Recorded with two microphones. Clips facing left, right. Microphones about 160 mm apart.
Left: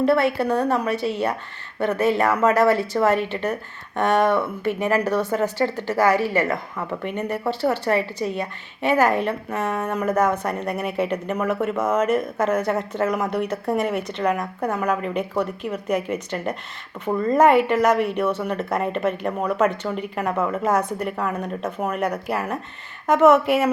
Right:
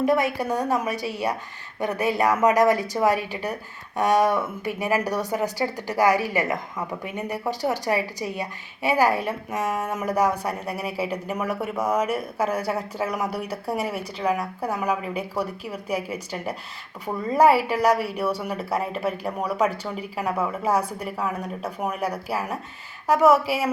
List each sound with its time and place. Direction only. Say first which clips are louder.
0.0 s a woman's voice: left 3 dB; 15° right (ahead or behind)